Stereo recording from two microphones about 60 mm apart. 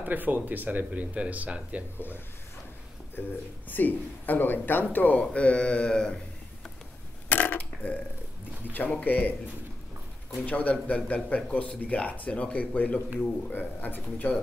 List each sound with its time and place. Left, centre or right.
0.0 s speech: right
2.0 s speech: left; by 6.1 s centre
7.2 s burping: left
9.0 s speech: left
10.4 s speech: left